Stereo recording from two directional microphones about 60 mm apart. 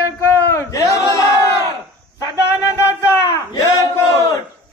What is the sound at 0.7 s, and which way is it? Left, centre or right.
Speech, left.